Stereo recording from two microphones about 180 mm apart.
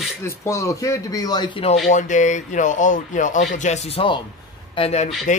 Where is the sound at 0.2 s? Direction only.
15° left (ahead or behind).